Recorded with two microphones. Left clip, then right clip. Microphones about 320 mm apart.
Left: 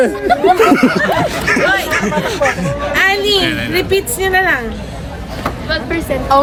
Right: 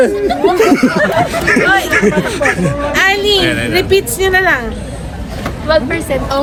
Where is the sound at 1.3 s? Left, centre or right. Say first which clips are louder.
Right 2 dB; centre.